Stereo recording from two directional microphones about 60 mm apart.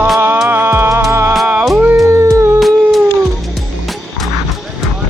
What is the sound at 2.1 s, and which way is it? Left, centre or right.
Cat, right.